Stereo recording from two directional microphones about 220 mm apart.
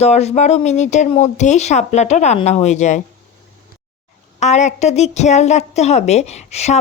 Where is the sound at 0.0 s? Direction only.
30° left (ahead or behind).